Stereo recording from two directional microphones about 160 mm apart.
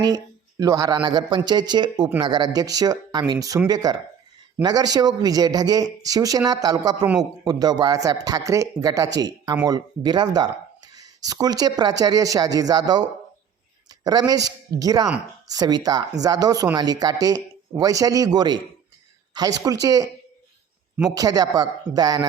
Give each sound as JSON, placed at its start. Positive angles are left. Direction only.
{"t": 0.0, "sound": "a sound", "side_deg": -25}
{"t": 1.0, "sound": "speech", "side_deg": -25}
{"t": 21.2, "sound": "speech", "side_deg": -25}